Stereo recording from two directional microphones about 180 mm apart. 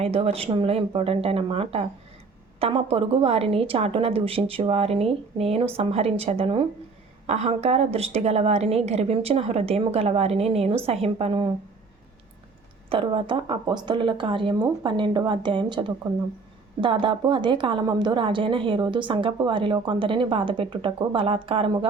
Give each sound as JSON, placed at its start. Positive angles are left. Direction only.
{"t": 0.0, "sound": "a woman's voice", "side_deg": -35}
{"t": 12.9, "sound": "a woman's voice", "side_deg": -30}